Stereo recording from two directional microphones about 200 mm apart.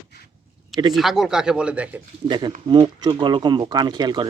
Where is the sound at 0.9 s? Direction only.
Centre (ahead or behind).